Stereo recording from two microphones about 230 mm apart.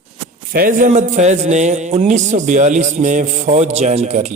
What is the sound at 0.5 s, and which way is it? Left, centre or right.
A man's voice, right.